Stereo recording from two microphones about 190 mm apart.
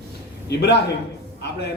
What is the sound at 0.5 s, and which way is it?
A man's voice, 60° left (ahead or behind).